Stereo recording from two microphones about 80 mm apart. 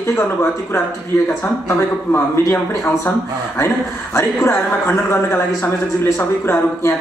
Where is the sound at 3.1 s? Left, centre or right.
Left.